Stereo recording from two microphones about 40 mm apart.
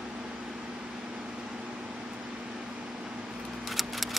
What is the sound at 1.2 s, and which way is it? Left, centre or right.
Vehicle, right.